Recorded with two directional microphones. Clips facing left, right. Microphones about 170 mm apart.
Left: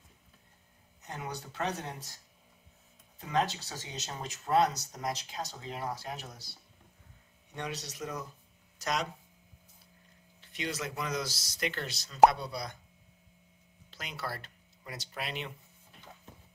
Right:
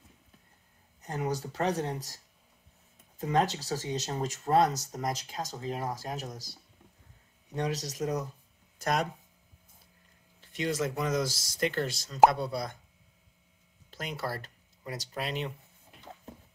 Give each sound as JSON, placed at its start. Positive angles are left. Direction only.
{"t": 1.0, "sound": "speech", "side_deg": -40}
{"t": 3.2, "sound": "speech", "side_deg": -40}
{"t": 8.7, "sound": "speech", "side_deg": -50}
{"t": 10.4, "sound": "speech", "side_deg": -45}
{"t": 13.8, "sound": "speech", "side_deg": -45}